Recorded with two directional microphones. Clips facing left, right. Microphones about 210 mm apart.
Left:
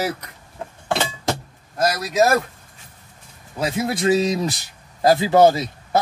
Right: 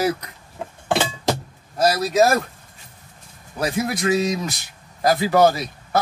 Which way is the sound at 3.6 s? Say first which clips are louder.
Left 1 dB; 25° left (ahead or behind).